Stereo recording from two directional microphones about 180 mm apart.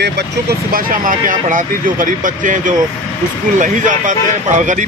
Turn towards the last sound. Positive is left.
turn(degrees=-45)  # may be behind; listen again after turning